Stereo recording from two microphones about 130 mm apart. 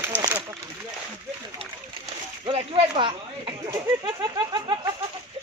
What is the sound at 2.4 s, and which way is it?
Speech, 45° right (ahead or behind).